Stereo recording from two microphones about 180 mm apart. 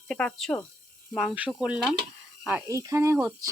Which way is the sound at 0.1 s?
5° left (ahead or behind).